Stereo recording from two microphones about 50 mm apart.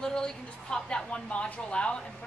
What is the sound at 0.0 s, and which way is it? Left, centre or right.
A woman's voice, centre.